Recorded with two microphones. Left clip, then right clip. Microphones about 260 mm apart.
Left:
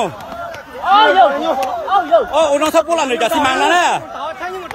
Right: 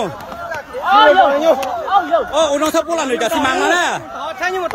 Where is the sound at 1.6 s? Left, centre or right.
Left.